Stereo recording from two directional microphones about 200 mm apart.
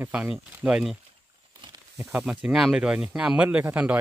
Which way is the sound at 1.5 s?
15° right (ahead or behind).